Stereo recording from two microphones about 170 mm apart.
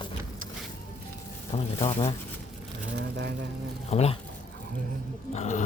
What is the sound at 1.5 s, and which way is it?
Speech, 35° left (ahead or behind).